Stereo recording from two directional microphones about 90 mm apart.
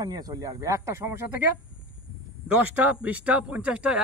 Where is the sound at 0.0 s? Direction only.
45° right (ahead or behind).